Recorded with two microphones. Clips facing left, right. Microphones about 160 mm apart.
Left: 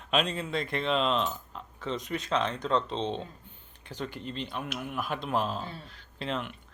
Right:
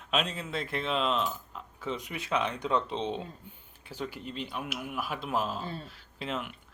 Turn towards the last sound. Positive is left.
turn(degrees=-5)  # may be behind; listen again after turning